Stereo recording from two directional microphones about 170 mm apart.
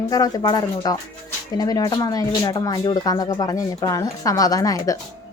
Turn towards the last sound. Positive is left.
turn(degrees=20)  # may be behind; listen again after turning